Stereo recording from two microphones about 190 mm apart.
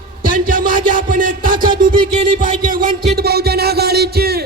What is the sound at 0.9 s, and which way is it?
Music, 45° right (ahead or behind).